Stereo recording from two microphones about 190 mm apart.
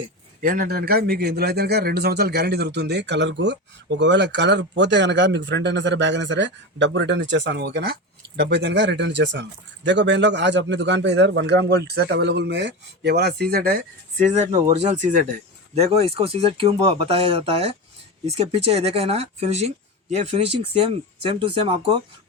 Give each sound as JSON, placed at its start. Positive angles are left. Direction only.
{"t": 0.4, "sound": "speech", "side_deg": -50}